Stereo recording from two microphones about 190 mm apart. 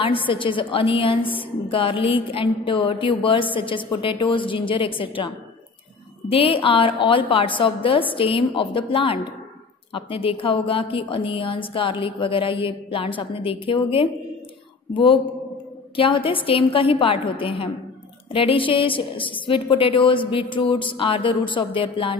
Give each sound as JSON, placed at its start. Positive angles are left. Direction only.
{"t": 0.0, "sound": "a woman's voice", "side_deg": 25}
{"t": 6.3, "sound": "a woman's voice", "side_deg": 30}
{"t": 16.0, "sound": "a woman's voice", "side_deg": 25}